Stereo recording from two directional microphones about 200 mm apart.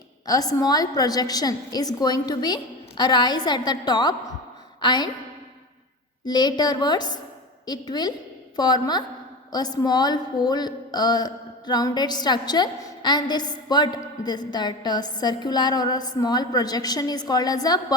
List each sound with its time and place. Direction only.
0.3 s a woman's voice: 20° left (ahead or behind)
6.2 s a woman's voice: 20° left (ahead or behind)